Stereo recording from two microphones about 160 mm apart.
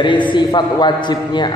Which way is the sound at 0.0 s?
30° left (ahead or behind).